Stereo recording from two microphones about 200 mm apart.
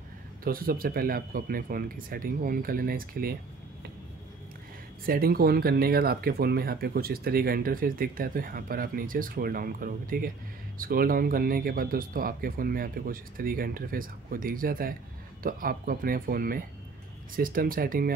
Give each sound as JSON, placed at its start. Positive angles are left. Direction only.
{"t": 0.4, "sound": "speech", "side_deg": -45}
{"t": 5.0, "sound": "speech", "side_deg": -45}